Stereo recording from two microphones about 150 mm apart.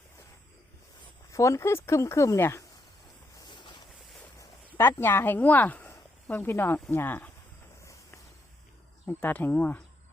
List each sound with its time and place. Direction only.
1.3 s speech: 20° left (ahead or behind)
3.3 s a sound: 30° left (ahead or behind)
4.4 s speech: 15° left (ahead or behind)
9.0 s speech: 10° left (ahead or behind)